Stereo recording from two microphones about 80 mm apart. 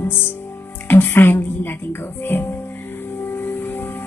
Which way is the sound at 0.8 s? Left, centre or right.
Left.